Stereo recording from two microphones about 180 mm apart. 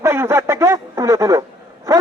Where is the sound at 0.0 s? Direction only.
15° right (ahead or behind).